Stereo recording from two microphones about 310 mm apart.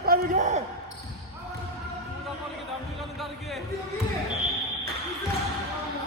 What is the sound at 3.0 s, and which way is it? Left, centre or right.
Music, centre.